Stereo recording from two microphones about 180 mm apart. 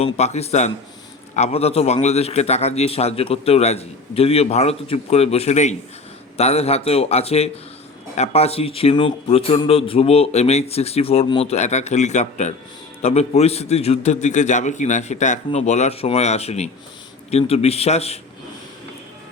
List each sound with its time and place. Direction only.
0.0 s speech: 35° left (ahead or behind)